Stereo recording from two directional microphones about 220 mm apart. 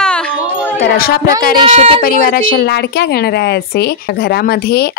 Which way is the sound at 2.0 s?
40° left (ahead or behind).